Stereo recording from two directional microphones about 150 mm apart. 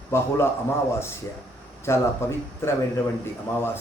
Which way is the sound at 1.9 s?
15° left (ahead or behind).